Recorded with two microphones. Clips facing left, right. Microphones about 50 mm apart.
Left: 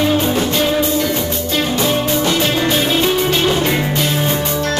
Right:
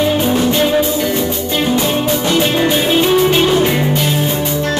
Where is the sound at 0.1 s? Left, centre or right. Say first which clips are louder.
Right 2 dB; centre.